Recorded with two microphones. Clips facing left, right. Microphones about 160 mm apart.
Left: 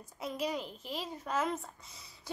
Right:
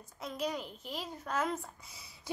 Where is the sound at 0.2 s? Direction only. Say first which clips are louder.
Left 1 dB; 5° left (ahead or behind).